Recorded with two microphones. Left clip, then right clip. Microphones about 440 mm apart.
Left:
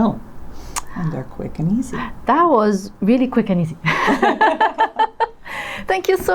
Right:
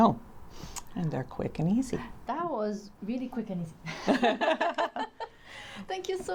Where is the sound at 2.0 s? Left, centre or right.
Left.